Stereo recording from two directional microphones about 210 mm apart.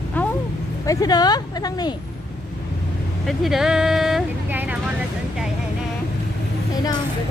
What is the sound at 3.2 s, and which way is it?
Speech, centre (ahead or behind).